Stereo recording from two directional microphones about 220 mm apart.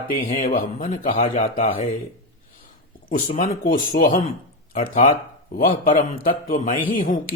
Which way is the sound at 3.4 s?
35° left (ahead or behind).